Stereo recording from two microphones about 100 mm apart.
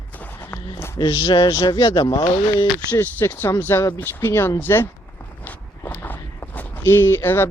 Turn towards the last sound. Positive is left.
turn(degrees=25)  # may be behind; listen again after turning